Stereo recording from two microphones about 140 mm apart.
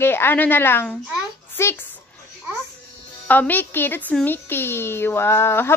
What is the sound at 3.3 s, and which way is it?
A woman's voice, 10° left (ahead or behind).